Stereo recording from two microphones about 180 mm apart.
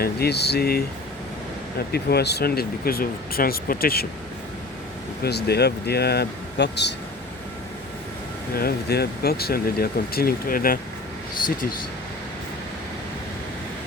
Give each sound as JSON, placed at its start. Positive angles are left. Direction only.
{"t": 0.0, "sound": "speech", "side_deg": 60}
{"t": 1.9, "sound": "speech", "side_deg": 65}
{"t": 5.2, "sound": "speech", "side_deg": 65}
{"t": 8.5, "sound": "speech", "side_deg": 60}